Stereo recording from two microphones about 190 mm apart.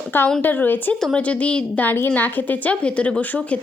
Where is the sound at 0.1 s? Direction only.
5° left (ahead or behind).